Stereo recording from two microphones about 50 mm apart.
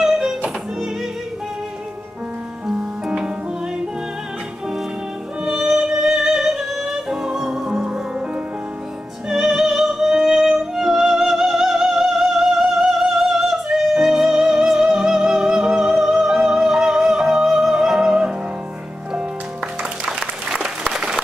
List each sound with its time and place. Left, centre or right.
0.0 s music: centre
2.6 s music: centre
5.4 s music: centre
9.3 s music: centre
20.4 s applause: centre